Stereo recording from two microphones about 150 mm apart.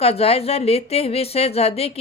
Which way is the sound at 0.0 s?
40° left (ahead or behind).